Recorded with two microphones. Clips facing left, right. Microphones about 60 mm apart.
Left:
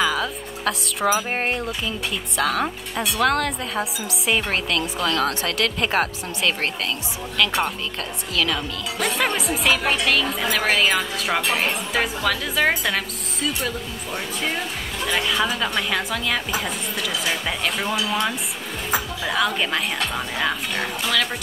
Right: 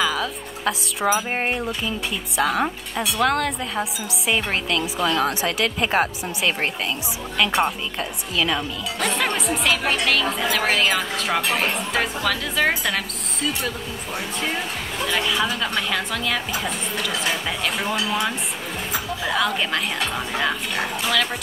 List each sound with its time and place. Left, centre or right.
0.0 s a woman's voice: centre
9.0 s speech: centre